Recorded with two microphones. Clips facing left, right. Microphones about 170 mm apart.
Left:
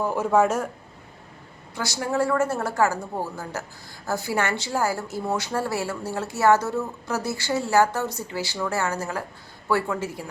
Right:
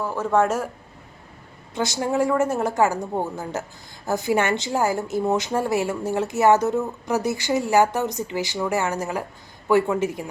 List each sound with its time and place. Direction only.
0.0 s speech: 15° left (ahead or behind)
1.7 s a woman's voice: 20° right (ahead or behind)